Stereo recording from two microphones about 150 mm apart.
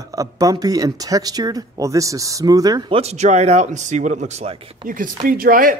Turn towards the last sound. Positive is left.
turn(degrees=-70)  # may be behind; listen again after turning